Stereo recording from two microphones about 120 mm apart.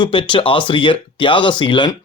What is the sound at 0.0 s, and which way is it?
Speech, 45° left (ahead or behind).